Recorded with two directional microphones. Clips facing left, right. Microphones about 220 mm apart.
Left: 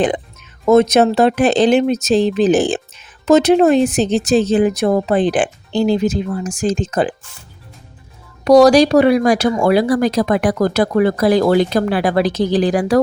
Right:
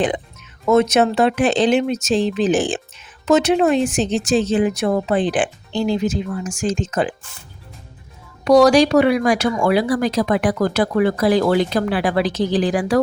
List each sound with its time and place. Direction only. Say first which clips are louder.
0.6 s speech: left 4 dB; 35° left (ahead or behind)
8.4 s speech: left 3 dB; 35° left (ahead or behind)